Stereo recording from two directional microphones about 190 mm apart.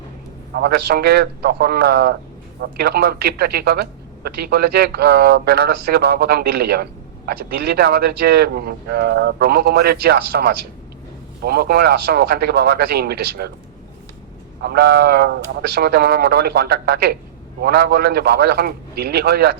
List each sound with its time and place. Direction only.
0.5 s speech: 55° right (ahead or behind)
14.6 s speech: 55° right (ahead or behind)